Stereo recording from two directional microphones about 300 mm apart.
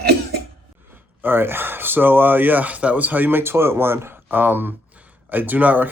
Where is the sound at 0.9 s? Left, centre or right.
Centre.